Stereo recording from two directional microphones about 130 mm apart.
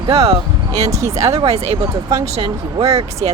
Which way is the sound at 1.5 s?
50° right (ahead or behind).